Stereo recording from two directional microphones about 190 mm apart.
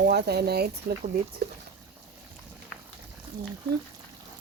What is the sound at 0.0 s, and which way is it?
Speech, 60° right (ahead or behind).